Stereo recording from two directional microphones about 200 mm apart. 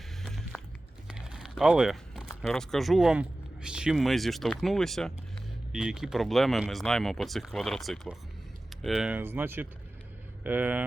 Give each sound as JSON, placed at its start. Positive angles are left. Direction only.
{"t": 0.2, "sound": "music", "side_deg": 0}
{"t": 1.0, "sound": "a sound", "side_deg": -5}
{"t": 2.4, "sound": "speech", "side_deg": 0}